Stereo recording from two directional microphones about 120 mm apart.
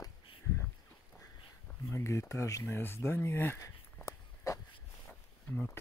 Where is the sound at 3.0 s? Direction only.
25° left (ahead or behind).